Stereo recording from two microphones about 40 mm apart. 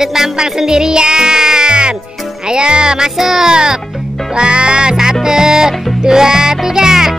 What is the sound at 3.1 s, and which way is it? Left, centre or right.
Music, centre.